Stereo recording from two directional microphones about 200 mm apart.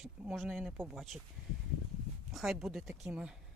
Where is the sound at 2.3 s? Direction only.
Centre (ahead or behind).